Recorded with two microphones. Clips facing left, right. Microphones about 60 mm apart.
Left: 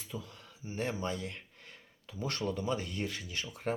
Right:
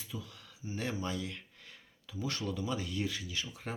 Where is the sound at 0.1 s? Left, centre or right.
Left.